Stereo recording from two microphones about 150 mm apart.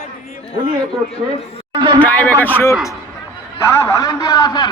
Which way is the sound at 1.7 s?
30° right (ahead or behind).